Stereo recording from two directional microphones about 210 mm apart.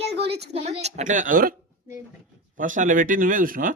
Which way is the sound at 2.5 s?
40° right (ahead or behind).